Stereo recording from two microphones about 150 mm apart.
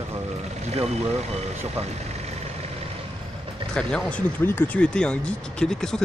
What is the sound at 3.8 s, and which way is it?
Speech, 5° left (ahead or behind).